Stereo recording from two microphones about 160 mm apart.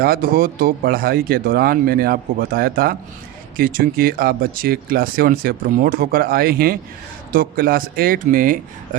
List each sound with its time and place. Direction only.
0.0 s speech: 65° right (ahead or behind)